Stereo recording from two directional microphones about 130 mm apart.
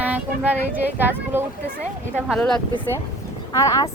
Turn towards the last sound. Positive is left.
turn(degrees=25)  # may be behind; listen again after turning